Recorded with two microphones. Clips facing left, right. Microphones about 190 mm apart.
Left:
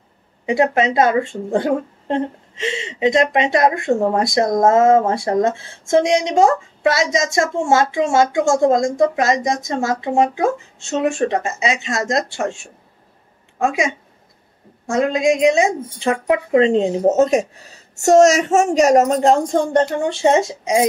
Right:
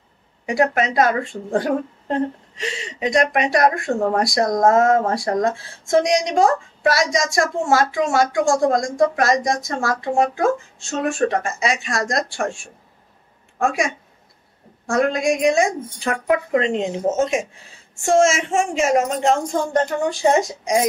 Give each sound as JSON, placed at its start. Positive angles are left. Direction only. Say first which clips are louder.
{"t": 0.5, "sound": "a woman's voice", "louder": "left 3 dB", "side_deg": 25}
{"t": 13.6, "sound": "a woman's voice", "louder": "left 2 dB", "side_deg": 20}